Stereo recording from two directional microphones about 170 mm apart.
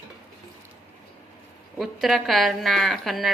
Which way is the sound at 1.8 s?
Centre (ahead or behind).